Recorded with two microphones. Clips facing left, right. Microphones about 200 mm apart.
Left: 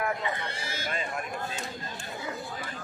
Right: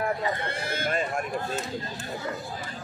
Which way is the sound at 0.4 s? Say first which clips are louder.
Right 6 dB; 55° right (ahead or behind).